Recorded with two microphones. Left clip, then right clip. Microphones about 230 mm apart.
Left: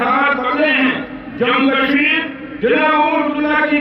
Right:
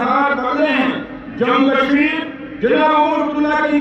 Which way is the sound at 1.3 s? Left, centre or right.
Right.